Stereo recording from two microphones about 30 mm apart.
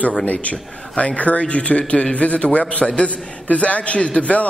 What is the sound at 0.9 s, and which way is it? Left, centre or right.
Speech, left.